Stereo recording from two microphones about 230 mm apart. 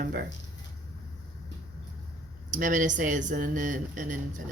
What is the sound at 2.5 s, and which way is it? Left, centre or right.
Speech, right.